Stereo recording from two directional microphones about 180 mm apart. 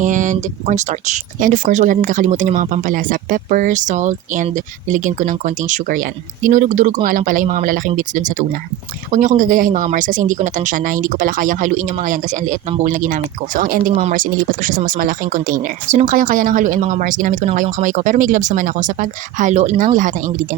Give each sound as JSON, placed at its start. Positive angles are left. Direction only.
{"t": 0.0, "sound": "speech", "side_deg": -45}